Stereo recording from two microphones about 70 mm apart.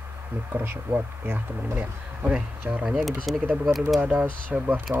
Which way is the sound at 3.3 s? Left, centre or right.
Centre.